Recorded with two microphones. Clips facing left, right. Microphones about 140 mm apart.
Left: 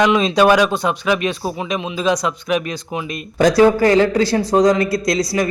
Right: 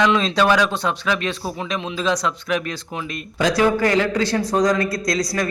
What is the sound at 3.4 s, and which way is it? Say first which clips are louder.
Speech: left 6 dB; 40° left (ahead or behind).